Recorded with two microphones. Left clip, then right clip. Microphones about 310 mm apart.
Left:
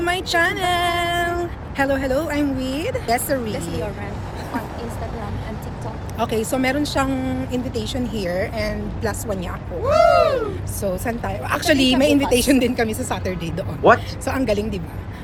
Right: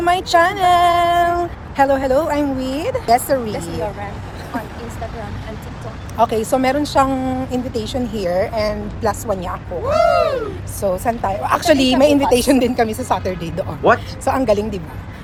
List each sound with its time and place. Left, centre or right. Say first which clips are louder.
0.0 s speech: right 5 dB; centre
3.5 s speech: right 3 dB; right
6.1 s speech: right 6 dB; centre